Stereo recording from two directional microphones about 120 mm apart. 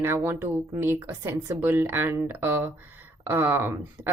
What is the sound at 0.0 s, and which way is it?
A woman's voice, 20° right (ahead or behind).